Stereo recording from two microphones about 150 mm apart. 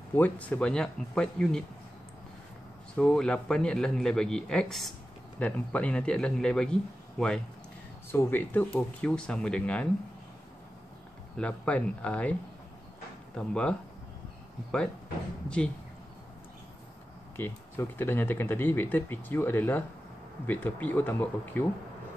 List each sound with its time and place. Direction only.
0.1 s a man's voice: 10° left (ahead or behind)
3.0 s a man's voice: 5° left (ahead or behind)
8.1 s speech: 15° left (ahead or behind)
11.3 s speech: 10° left (ahead or behind)
13.4 s speech: 5° left (ahead or behind)
17.4 s speech: 15° left (ahead or behind)